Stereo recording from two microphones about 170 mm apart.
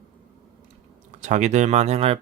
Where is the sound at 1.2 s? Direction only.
45° right (ahead or behind).